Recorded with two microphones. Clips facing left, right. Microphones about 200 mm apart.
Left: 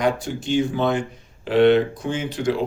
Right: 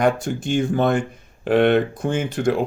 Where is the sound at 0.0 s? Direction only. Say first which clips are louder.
Right 3 dB; 50° right (ahead or behind).